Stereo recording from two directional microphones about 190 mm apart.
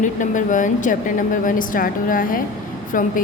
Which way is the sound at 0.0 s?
40° left (ahead or behind).